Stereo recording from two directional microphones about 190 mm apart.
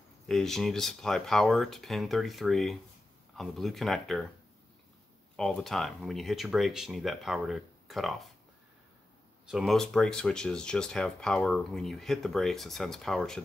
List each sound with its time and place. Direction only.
0.3 s speech: centre (ahead or behind)
5.3 s speech: 5° left (ahead or behind)
9.5 s speech: centre (ahead or behind)